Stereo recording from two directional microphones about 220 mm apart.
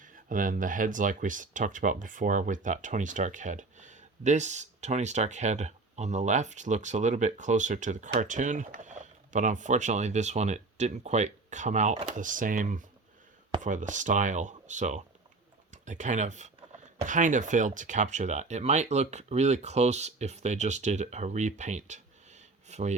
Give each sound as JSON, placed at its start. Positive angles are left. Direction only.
{"t": 0.0, "sound": "speech", "side_deg": -35}